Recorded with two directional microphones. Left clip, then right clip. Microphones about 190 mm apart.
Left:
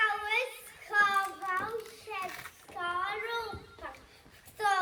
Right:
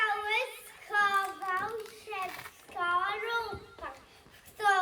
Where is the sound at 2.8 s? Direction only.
20° right (ahead or behind).